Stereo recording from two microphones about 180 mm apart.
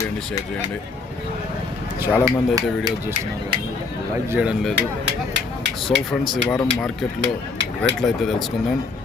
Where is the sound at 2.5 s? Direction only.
20° right (ahead or behind).